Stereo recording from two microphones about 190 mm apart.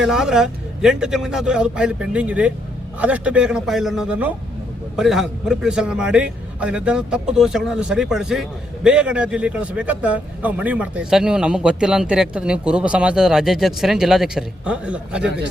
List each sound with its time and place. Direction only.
0.0 s a man's voice: 5° right (ahead or behind)